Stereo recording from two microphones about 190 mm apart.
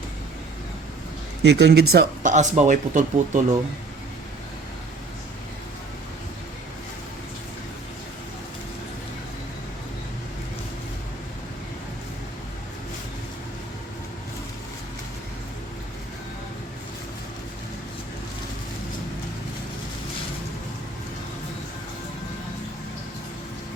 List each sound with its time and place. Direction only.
1.4 s speech: 60° right (ahead or behind)
2.3 s speech: 40° right (ahead or behind)